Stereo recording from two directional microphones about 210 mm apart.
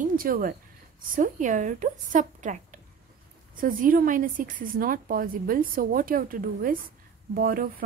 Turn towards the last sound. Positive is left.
turn(degrees=-40)  # may be behind; listen again after turning